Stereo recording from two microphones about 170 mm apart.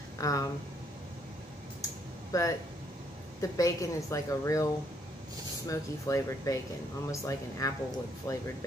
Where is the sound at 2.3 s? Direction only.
20° left (ahead or behind).